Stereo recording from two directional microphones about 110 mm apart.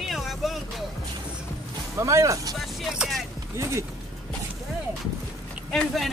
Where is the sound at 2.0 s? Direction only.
30° right (ahead or behind).